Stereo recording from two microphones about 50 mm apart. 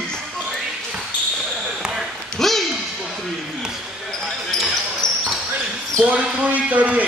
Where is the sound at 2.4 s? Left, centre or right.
Centre.